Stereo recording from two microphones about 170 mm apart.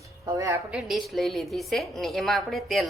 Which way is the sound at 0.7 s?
5° right (ahead or behind).